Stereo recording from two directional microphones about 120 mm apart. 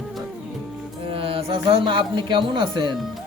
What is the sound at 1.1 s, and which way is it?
Speech, 50° right (ahead or behind).